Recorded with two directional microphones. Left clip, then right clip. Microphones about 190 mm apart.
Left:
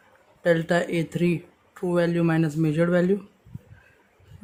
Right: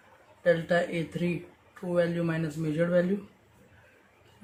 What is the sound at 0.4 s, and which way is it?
Speech, 60° left (ahead or behind).